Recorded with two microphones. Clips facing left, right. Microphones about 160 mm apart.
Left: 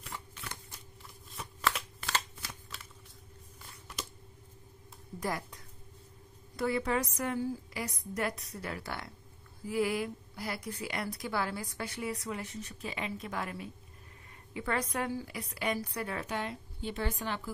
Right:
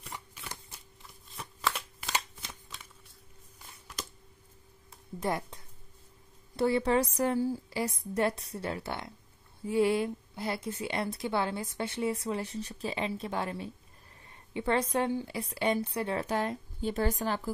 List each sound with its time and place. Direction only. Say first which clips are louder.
0.1 s shuffling cards: even; 10° right (ahead or behind)
5.2 s a woman's voice: right 4 dB; 25° right (ahead or behind)